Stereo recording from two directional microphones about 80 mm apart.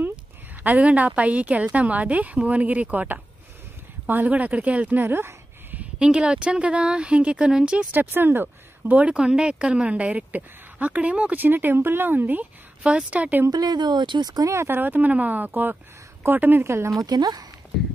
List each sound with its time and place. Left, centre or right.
0.7 s a woman's voice: centre
5.9 s a woman's voice: centre
7.9 s speech: right
13.5 s speech: right
14.5 s speech: right
17.0 s speech: right